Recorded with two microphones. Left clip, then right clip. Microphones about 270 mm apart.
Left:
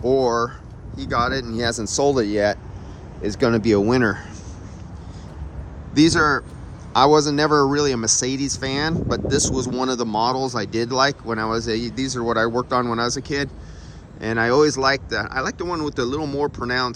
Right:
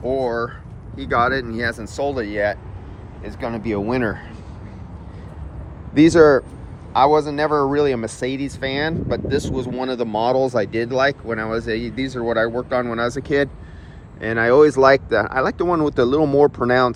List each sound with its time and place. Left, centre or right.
0.0 s speech: centre
5.9 s speech: centre
6.9 s speech: centre